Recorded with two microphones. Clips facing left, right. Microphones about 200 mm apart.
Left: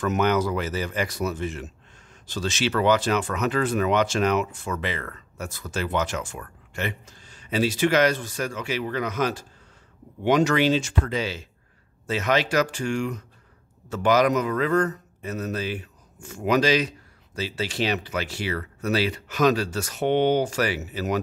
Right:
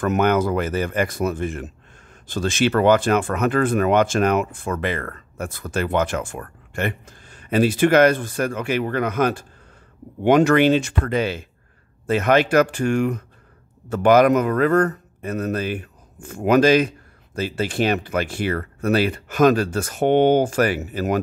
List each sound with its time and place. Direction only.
0.0 s a man's voice: 55° right (ahead or behind)